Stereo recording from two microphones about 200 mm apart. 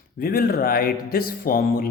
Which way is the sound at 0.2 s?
50° left (ahead or behind).